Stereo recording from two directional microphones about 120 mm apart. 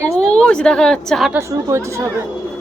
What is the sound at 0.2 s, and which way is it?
A woman's voice, 5° left (ahead or behind).